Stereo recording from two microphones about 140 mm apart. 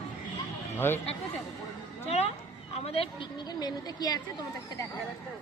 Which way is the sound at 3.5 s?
30° left (ahead or behind).